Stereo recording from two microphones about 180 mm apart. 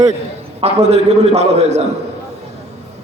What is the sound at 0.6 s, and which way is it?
Speech, 35° right (ahead or behind).